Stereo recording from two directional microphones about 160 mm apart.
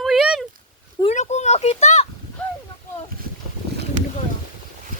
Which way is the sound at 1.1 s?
45° left (ahead or behind).